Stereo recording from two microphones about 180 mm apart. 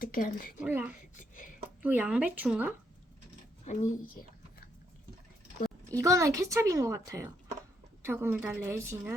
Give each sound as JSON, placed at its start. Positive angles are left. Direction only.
{"t": 0.0, "sound": "speech", "side_deg": 50}
{"t": 0.6, "sound": "a child's voice", "side_deg": -10}
{"t": 1.1, "sound": "a sound", "side_deg": 45}
{"t": 1.8, "sound": "a child's voice", "side_deg": -10}
{"t": 3.7, "sound": "speech", "side_deg": 45}
{"t": 6.0, "sound": "a child's voice", "side_deg": -15}